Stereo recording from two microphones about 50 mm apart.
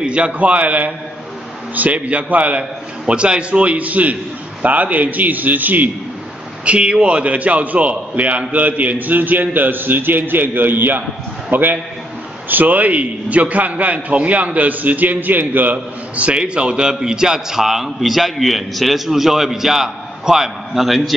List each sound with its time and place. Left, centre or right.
0.0 s a man's voice: right
6.6 s a man's voice: right; by 21.1 s centre